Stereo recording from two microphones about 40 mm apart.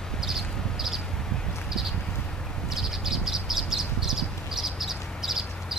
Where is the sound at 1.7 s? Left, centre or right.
Centre.